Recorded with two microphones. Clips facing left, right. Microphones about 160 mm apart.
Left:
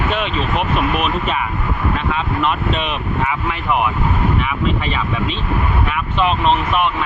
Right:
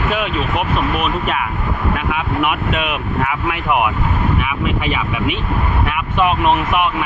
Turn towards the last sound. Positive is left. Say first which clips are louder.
# right 1 dB
turn(degrees=-10)  # may be behind; listen again after turning